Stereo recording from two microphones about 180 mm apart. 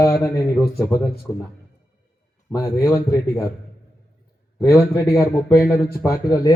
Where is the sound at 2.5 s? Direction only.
15° left (ahead or behind).